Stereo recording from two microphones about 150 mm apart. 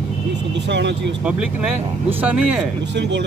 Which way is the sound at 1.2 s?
5° right (ahead or behind).